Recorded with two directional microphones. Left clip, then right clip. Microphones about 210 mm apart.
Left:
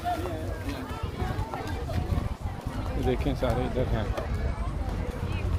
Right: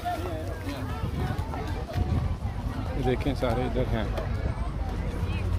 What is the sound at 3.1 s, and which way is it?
Speech, 15° right (ahead or behind).